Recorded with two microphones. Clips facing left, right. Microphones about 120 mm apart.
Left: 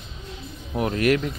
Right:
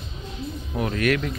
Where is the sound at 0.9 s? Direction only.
25° left (ahead or behind).